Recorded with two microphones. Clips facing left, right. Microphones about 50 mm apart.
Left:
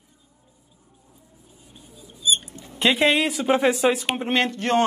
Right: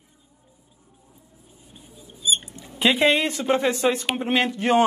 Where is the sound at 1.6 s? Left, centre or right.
Centre.